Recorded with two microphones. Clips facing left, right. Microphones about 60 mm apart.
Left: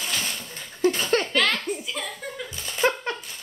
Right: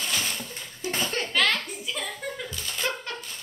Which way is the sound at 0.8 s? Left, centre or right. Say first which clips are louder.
Left 7 dB; left.